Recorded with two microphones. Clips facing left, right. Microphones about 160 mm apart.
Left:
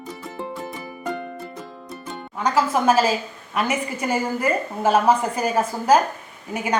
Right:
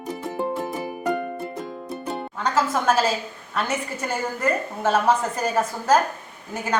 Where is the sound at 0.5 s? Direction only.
40° right (ahead or behind).